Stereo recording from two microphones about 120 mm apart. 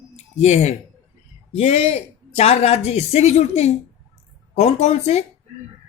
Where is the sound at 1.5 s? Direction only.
60° left (ahead or behind).